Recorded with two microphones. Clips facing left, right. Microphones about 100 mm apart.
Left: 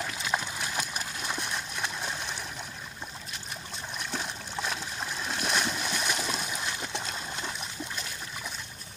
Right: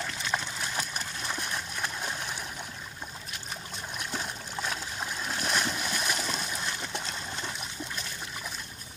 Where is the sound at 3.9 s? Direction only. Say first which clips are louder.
Left 1 dB; centre (ahead or behind).